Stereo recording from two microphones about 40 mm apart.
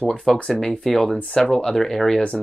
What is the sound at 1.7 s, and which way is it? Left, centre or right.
Speech, centre.